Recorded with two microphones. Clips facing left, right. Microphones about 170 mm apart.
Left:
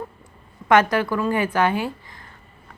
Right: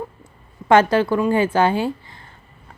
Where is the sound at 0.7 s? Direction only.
30° right (ahead or behind).